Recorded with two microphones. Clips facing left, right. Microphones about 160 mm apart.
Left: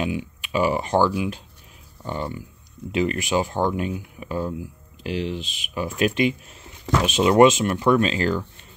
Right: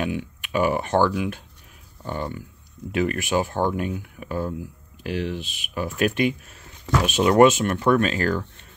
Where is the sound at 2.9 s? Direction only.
50° right (ahead or behind).